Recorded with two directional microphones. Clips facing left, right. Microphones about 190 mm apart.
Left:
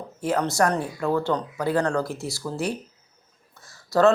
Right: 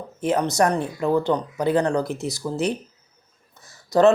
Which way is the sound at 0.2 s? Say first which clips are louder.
Right 2 dB; 20° right (ahead or behind).